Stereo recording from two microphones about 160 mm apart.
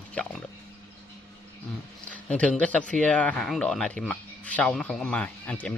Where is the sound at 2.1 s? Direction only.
10° left (ahead or behind).